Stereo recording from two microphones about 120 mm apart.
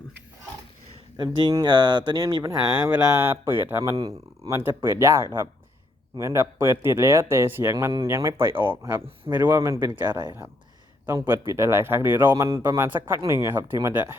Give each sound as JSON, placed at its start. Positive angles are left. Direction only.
{"t": 1.1, "sound": "speech", "side_deg": -35}
{"t": 2.9, "sound": "speech", "side_deg": -20}
{"t": 9.7, "sound": "speech", "side_deg": -40}
{"t": 11.0, "sound": "speech", "side_deg": -20}